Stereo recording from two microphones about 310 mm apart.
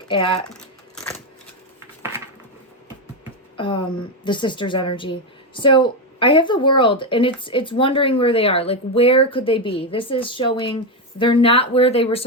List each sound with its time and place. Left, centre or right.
0.1 s speech: centre
0.5 s a sound: centre
3.6 s speech: centre